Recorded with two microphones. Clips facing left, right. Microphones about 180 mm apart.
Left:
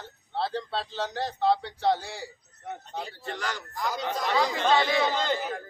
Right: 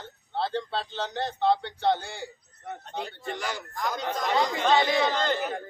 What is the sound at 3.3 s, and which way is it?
Speech, 10° right (ahead or behind).